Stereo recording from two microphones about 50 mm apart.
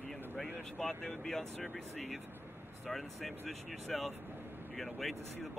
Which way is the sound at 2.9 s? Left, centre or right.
Centre.